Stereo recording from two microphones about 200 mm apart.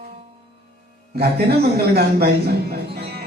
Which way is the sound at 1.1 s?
50° right (ahead or behind).